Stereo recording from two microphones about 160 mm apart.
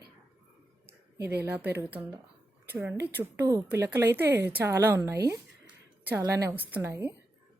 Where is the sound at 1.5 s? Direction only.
10° right (ahead or behind).